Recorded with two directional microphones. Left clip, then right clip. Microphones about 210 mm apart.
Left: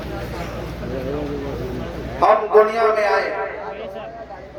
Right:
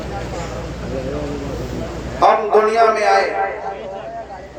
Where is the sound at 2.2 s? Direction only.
15° right (ahead or behind).